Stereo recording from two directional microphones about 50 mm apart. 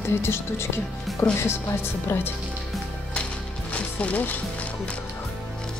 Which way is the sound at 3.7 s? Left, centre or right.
Left.